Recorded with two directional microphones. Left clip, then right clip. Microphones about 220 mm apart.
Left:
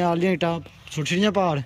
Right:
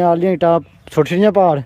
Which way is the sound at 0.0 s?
5° right (ahead or behind).